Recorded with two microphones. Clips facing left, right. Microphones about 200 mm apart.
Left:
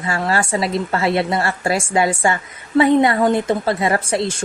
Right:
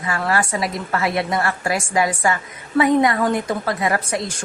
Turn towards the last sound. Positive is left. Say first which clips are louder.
# left 3 dB
turn(degrees=30)  # may be behind; listen again after turning